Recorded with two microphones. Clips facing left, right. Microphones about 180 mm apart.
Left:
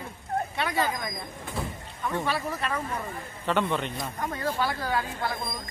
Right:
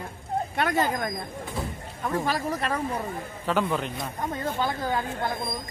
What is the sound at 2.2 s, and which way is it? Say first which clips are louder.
Speech: right 2 dB; 40° right (ahead or behind).